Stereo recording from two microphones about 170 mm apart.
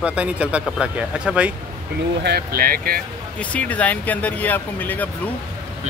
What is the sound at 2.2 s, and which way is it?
Speech, 65° right (ahead or behind).